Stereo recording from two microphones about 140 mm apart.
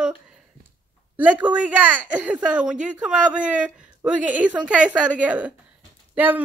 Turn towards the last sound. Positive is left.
turn(degrees=-10)  # may be behind; listen again after turning